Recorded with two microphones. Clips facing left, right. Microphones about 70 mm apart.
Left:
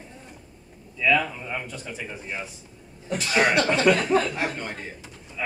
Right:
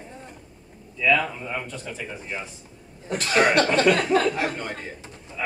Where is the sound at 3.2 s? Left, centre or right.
Right.